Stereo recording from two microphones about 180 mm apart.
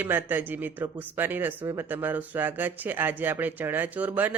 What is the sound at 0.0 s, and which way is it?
Speech, 10° right (ahead or behind).